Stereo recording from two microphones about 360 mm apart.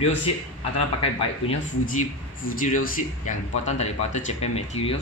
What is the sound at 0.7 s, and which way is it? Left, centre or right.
Speech, centre.